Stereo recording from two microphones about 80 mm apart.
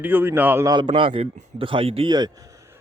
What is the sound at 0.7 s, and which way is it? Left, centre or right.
Speech, right.